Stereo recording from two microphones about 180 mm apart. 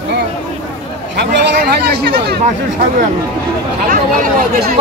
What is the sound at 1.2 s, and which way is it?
Speech, 70° right (ahead or behind).